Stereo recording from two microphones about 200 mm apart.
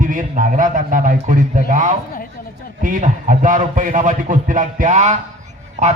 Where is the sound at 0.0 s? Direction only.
40° right (ahead or behind).